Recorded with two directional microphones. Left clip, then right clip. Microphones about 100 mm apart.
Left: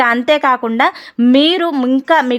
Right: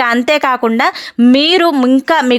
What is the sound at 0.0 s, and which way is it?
Speech, 25° right (ahead or behind).